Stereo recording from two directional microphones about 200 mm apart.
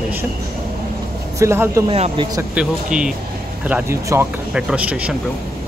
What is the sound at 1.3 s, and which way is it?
Speech, 15° right (ahead or behind).